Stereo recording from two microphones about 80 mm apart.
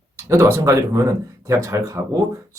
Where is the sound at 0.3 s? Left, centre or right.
Right.